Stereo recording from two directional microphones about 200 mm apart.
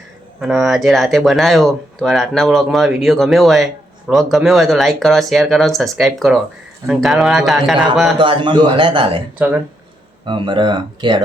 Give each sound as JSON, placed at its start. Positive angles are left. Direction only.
{"t": 0.3, "sound": "speech", "side_deg": -5}
{"t": 8.2, "sound": "a man's voice", "side_deg": -25}
{"t": 10.2, "sound": "a man's voice", "side_deg": -25}